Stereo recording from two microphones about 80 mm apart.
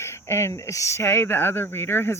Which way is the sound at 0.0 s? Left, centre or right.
Left.